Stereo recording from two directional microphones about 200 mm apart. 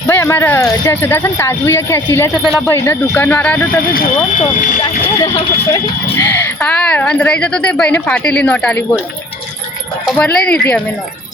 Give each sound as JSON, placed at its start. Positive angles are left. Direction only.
{"t": 0.1, "sound": "speech", "side_deg": 10}
{"t": 4.8, "sound": "speech", "side_deg": 25}
{"t": 10.2, "sound": "speech", "side_deg": 5}